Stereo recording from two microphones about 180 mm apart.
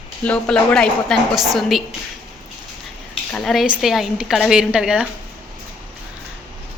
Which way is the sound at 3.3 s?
Centre (ahead or behind).